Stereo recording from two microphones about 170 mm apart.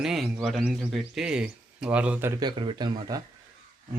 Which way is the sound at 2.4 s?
25° right (ahead or behind).